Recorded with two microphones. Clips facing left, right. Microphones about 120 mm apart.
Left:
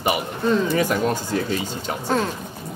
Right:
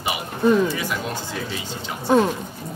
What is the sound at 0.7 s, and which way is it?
Speech, 45° left (ahead or behind).